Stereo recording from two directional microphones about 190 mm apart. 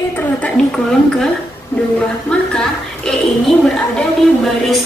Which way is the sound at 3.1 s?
5° left (ahead or behind).